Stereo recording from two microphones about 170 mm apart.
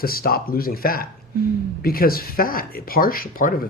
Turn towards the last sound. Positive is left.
turn(degrees=55)  # may be behind; listen again after turning